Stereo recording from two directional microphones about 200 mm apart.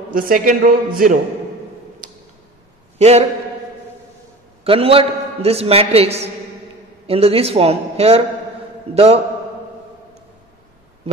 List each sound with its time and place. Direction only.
0.1 s a man's voice: 45° right (ahead or behind)
3.0 s a man's voice: 35° right (ahead or behind)
4.6 s a man's voice: 30° right (ahead or behind)